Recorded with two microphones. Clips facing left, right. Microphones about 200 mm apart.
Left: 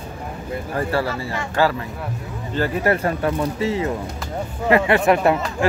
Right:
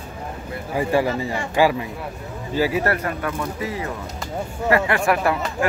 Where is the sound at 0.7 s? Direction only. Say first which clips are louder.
Right 3 dB; 15° right (ahead or behind).